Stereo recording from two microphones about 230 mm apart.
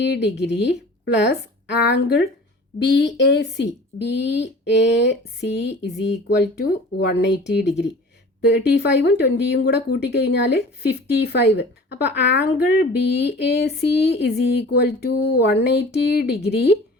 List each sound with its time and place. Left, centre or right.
0.0 s speech: left